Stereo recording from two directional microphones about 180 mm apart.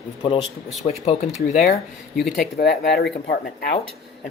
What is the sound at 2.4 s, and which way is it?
Speech, 60° left (ahead or behind).